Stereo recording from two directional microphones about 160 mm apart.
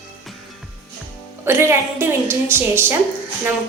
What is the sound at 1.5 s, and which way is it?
A woman's voice, 15° right (ahead or behind).